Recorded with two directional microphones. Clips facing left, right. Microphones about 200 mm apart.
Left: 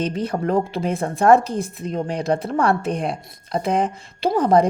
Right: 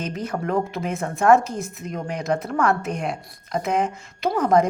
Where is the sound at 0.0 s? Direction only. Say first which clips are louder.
Left 4 dB; 30° left (ahead or behind).